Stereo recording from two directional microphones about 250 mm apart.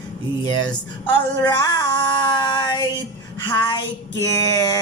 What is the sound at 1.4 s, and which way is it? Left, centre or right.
A woman's voice, centre.